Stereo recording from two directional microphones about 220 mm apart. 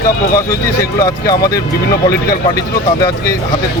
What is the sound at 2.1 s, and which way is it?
Speech, 45° left (ahead or behind).